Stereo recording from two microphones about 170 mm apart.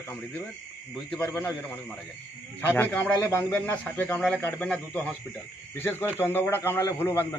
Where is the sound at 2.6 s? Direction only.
10° left (ahead or behind).